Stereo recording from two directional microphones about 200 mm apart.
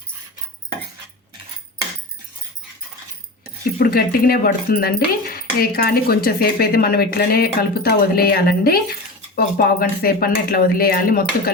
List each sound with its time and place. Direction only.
3.8 s speech: 50° left (ahead or behind)